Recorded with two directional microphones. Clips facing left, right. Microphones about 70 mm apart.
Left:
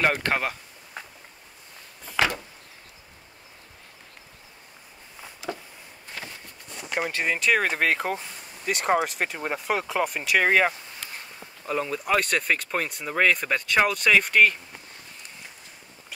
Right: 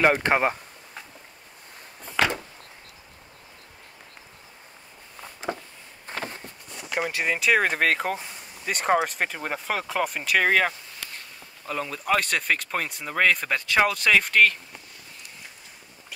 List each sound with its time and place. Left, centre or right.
0.0 s speech: centre
5.5 s a sound: right
7.1 s speech: centre